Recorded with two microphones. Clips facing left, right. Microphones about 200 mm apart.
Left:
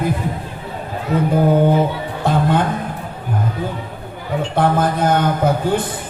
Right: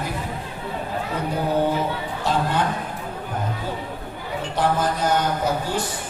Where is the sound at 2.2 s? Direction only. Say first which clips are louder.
Left 5 dB; 55° left (ahead or behind).